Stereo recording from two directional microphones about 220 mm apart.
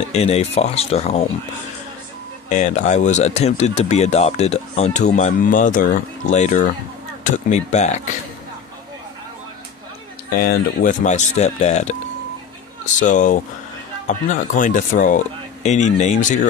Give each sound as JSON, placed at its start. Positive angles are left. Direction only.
{"t": 0.1, "sound": "speech", "side_deg": 30}
{"t": 2.5, "sound": "speech", "side_deg": 35}
{"t": 10.3, "sound": "speech", "side_deg": 40}
{"t": 13.0, "sound": "speech", "side_deg": 35}